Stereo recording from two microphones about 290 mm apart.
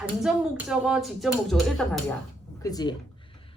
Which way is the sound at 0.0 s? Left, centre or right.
Centre.